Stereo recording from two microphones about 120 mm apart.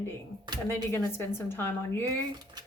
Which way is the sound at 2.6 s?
35° right (ahead or behind).